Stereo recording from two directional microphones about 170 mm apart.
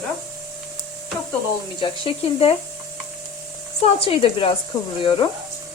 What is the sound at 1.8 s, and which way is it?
Speech, 35° left (ahead or behind).